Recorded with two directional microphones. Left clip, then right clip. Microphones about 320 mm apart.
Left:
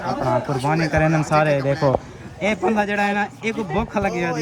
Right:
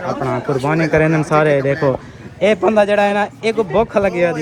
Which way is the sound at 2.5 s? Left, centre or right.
Centre.